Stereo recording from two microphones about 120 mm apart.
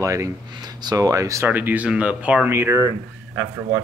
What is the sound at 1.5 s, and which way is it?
Speech, 15° right (ahead or behind).